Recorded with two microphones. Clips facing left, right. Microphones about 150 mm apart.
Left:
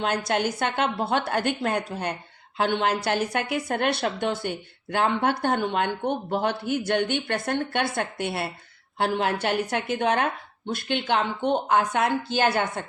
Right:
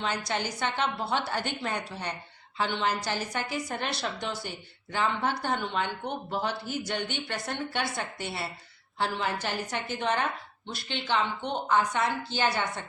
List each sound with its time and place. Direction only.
0.0 s a woman's voice: 55° left (ahead or behind)